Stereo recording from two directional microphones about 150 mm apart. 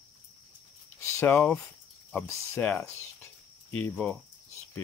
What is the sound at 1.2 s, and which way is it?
Speech, 15° left (ahead or behind).